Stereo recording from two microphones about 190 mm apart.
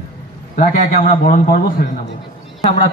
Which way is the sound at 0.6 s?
45° left (ahead or behind).